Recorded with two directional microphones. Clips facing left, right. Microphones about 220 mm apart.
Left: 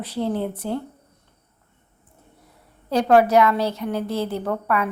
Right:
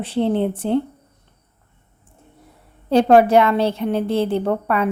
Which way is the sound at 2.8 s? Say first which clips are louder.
Right 4 dB; 25° right (ahead or behind).